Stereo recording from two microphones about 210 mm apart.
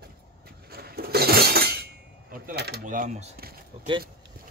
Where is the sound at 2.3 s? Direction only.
45° right (ahead or behind).